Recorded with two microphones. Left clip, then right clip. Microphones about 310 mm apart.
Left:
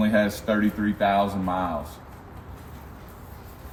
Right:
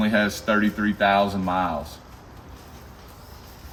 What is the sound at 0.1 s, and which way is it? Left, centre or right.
Speech, centre.